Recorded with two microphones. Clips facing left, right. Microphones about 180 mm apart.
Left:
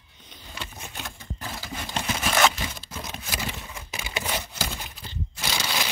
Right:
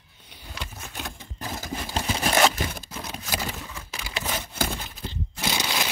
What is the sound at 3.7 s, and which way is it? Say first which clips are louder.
Crumpling: left 1 dB; 15° left (ahead or behind).